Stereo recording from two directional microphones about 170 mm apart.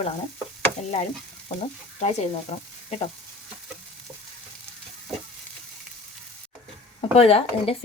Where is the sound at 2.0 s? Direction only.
40° left (ahead or behind).